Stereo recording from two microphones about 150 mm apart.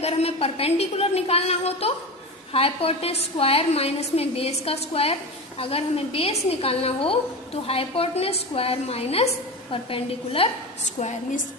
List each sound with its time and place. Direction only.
0.0 s a woman's voice: 40° left (ahead or behind)
11.0 s a woman's voice: 60° left (ahead or behind)